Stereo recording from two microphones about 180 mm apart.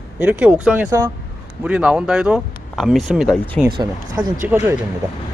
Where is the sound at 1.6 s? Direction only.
5° right (ahead or behind).